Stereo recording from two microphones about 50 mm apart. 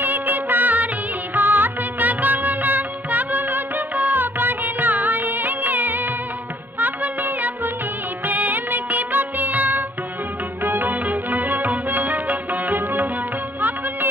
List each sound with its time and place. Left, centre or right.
0.0 s music: right